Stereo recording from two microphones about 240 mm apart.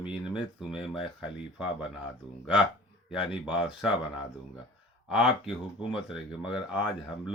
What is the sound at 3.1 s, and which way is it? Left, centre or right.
Speech, centre.